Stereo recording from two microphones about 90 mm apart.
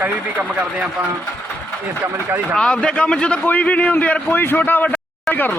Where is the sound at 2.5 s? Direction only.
10° left (ahead or behind).